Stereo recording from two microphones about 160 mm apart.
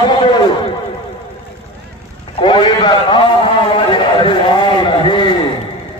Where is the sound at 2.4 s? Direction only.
30° left (ahead or behind).